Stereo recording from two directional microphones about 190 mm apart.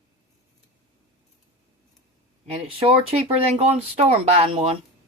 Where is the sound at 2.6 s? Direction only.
30° right (ahead or behind).